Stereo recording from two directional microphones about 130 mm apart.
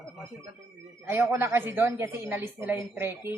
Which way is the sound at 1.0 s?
20° right (ahead or behind).